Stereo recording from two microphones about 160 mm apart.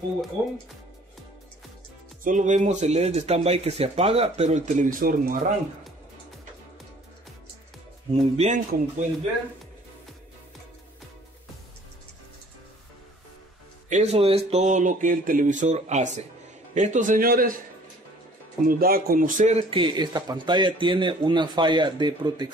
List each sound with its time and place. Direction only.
0.4 s speech: 15° right (ahead or behind)
2.2 s speech: 50° right (ahead or behind)
8.1 s speech: 45° right (ahead or behind)
13.8 s speech: 45° right (ahead or behind); by 17.6 s 65° right (ahead or behind)
18.7 s speech: 65° right (ahead or behind); by 19.6 s 50° right (ahead or behind)
19.7 s a man's voice: 30° right (ahead or behind)